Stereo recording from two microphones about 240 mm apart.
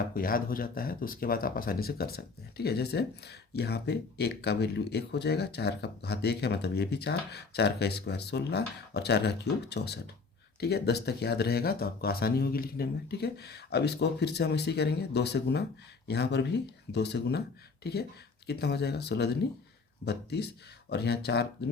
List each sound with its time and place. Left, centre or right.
0.2 s speech: left